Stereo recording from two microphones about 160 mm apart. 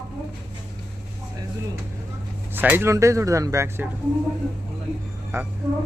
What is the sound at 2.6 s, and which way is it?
Speech, 15° right (ahead or behind).